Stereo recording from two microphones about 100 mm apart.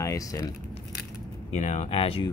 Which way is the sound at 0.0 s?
35° left (ahead or behind).